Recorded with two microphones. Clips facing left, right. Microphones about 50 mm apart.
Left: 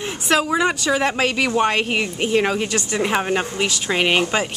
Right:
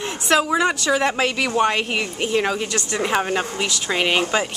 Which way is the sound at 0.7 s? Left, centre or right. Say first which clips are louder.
Even; centre.